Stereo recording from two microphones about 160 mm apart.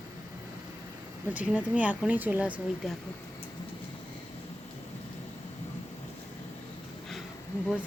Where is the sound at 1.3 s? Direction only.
10° right (ahead or behind).